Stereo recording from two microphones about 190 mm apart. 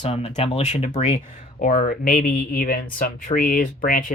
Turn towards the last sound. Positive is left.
turn(degrees=45)  # may be behind; listen again after turning